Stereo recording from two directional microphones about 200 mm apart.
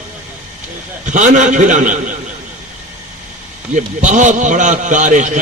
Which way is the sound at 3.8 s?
40° right (ahead or behind).